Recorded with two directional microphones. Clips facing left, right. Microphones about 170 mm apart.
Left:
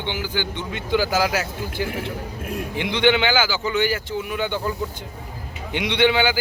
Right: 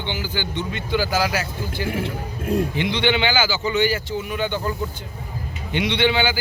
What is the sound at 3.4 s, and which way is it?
Speech, 10° right (ahead or behind).